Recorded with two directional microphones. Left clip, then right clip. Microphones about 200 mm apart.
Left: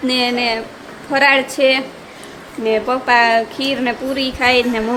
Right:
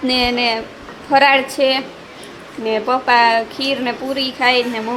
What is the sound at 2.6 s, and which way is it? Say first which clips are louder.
A woman's voice: even; 5° left (ahead or behind).